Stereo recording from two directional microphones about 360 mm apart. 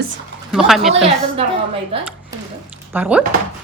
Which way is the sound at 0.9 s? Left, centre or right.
Centre.